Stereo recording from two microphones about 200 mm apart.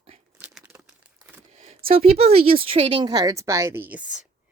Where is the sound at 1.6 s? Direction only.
30° right (ahead or behind); by 4.0 s 10° right (ahead or behind).